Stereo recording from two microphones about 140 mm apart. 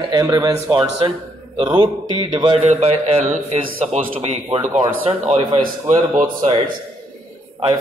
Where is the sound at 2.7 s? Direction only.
50° right (ahead or behind).